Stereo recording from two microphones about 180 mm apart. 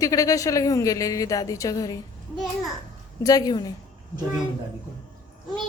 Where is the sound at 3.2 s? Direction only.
20° left (ahead or behind).